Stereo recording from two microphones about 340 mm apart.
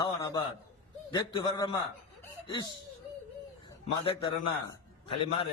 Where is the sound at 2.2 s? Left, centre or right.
Centre.